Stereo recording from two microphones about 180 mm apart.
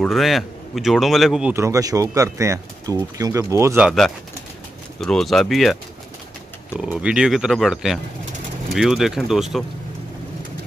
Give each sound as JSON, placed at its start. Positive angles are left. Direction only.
{"t": 0.0, "sound": "speech", "side_deg": 0}
{"t": 1.5, "sound": "speech", "side_deg": -15}
{"t": 3.8, "sound": "speech", "side_deg": 0}
{"t": 6.9, "sound": "speech", "side_deg": -5}